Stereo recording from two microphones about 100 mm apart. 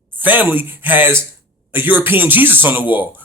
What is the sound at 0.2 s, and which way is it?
Speech, 20° right (ahead or behind).